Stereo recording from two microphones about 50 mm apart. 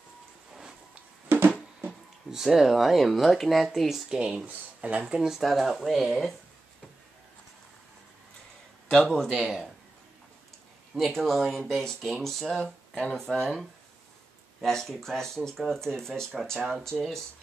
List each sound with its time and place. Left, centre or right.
1.3 s music: right
2.3 s speech: centre
4.2 s speech: centre
4.5 s speech: right
5.0 s speech: centre
8.9 s speech: centre
11.0 s speech: centre
12.5 s speech: centre
14.6 s speech: centre